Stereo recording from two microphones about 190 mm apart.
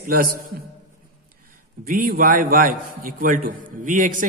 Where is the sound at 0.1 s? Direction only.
50° right (ahead or behind).